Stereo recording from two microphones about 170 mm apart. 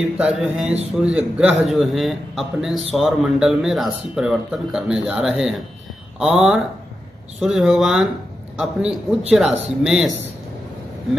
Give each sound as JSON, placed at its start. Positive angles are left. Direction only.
{"t": 0.2, "sound": "speech", "side_deg": -5}